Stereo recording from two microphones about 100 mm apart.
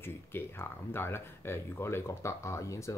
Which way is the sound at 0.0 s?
25° left (ahead or behind).